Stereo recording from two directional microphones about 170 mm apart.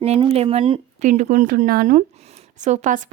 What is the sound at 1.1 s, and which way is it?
A woman's voice, 50° right (ahead or behind).